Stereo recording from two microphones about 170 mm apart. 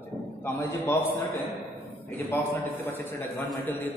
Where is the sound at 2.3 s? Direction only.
10° left (ahead or behind).